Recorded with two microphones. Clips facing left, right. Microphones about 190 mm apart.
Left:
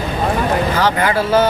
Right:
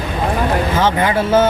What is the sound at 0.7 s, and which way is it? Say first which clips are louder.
Speech: right 1 dB; 25° right (ahead or behind).